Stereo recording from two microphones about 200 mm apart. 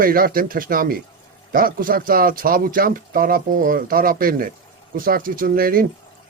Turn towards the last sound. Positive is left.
turn(degrees=-45)  # may be behind; listen again after turning